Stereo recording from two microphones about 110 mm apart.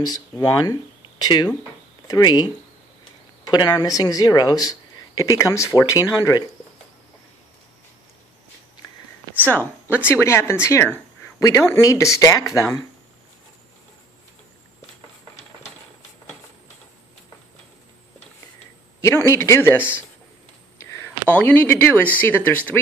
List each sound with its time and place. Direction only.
0.0 s speech: 35° left (ahead or behind)
9.5 s speech: 15° left (ahead or behind)
19.0 s speech: 25° left (ahead or behind)
21.3 s speech: 15° left (ahead or behind)